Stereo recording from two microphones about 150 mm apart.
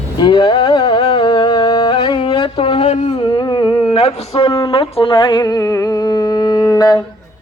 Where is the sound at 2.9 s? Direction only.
45° left (ahead or behind).